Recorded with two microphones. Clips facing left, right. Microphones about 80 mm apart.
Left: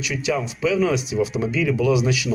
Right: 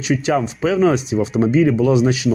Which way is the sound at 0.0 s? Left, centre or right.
Right.